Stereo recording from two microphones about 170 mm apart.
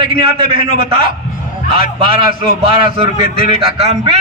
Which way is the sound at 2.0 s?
30° right (ahead or behind).